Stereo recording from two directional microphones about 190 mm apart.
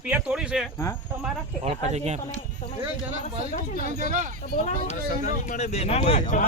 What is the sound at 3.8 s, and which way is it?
Speech, 40° right (ahead or behind).